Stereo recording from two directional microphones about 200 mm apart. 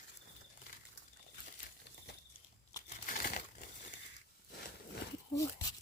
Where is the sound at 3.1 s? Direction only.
45° left (ahead or behind).